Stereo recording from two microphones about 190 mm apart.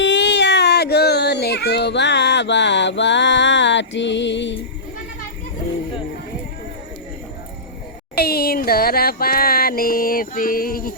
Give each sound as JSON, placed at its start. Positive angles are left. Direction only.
{"t": 0.0, "sound": "baby cry", "side_deg": 70}
{"t": 8.1, "sound": "music", "side_deg": 55}